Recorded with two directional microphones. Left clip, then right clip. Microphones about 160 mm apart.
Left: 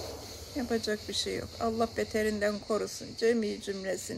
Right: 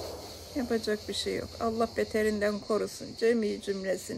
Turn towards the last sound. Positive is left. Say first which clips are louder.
# right 3 dB
turn(degrees=-30)  # may be behind; listen again after turning